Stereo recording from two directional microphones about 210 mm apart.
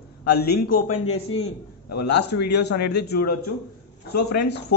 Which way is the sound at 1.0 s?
90° left.